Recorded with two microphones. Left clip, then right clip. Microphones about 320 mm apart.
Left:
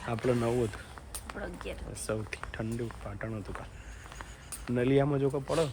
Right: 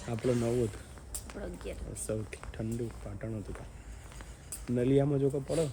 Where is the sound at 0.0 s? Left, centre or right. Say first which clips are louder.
Left 2 dB; centre.